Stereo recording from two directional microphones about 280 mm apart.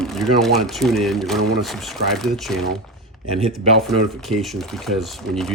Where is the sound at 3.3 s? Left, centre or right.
Right.